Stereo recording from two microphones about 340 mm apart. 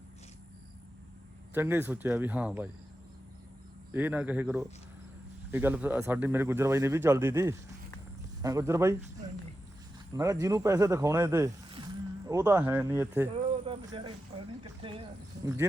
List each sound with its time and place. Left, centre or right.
1.5 s speech: centre
3.9 s speech: centre
10.2 s speech: centre
13.3 s a sound: centre
14.6 s speech: centre